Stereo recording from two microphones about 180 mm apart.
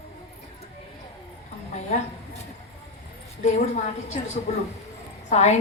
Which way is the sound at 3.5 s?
40° left (ahead or behind).